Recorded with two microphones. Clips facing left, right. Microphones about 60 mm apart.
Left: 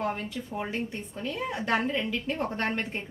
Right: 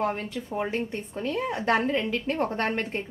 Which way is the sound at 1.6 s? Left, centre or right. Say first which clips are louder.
Right 3 dB; right.